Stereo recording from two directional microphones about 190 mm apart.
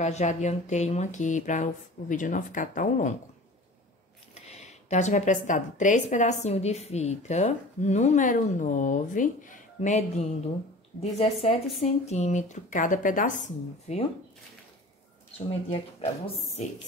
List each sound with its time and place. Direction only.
0.0 s a woman's voice: 40° left (ahead or behind)
4.5 s a woman's voice: 35° left (ahead or behind)
15.3 s a woman's voice: 30° left (ahead or behind)